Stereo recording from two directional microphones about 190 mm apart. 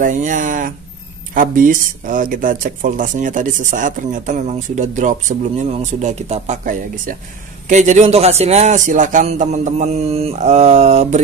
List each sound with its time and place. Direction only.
0.0 s a man's voice: 45° right (ahead or behind)